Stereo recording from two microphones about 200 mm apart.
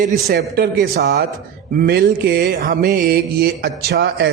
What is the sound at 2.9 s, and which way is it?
Mantra, 50° right (ahead or behind).